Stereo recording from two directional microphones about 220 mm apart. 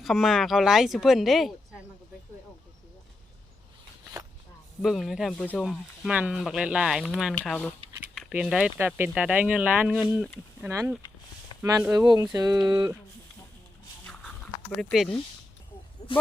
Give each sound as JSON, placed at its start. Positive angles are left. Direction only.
{"t": 0.0, "sound": "speech", "side_deg": 0}
{"t": 4.8, "sound": "speech", "side_deg": 0}
{"t": 14.8, "sound": "speech", "side_deg": 0}
{"t": 16.0, "sound": "a sound", "side_deg": 25}